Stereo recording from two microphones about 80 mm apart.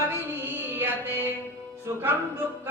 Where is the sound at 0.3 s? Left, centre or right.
Right.